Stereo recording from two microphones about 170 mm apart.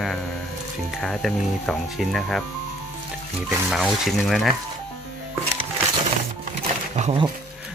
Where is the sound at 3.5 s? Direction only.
Centre (ahead or behind).